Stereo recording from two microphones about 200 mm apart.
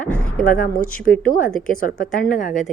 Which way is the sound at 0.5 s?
45° left (ahead or behind).